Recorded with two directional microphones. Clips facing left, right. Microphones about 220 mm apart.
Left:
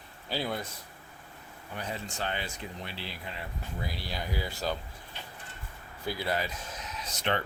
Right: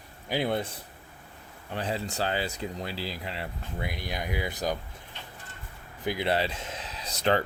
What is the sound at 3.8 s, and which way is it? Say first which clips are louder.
Speech: right 4 dB; 15° right (ahead or behind).